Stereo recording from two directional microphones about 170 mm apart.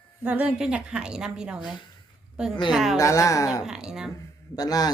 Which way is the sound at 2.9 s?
20° left (ahead or behind).